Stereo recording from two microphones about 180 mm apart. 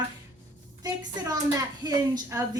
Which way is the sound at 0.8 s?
20° right (ahead or behind).